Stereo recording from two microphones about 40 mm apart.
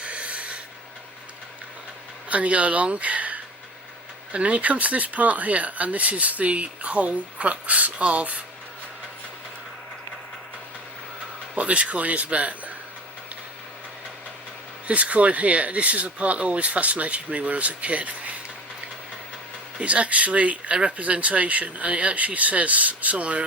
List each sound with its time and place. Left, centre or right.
0.0 s a sound: right
2.3 s speech: right
11.5 s speech: right
14.8 s speech: right
19.8 s speech: right